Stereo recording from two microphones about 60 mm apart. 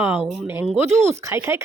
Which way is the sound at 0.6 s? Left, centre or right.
Centre.